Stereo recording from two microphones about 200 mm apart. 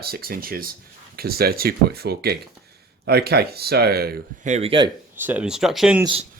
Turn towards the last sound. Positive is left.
turn(degrees=-5)  # may be behind; listen again after turning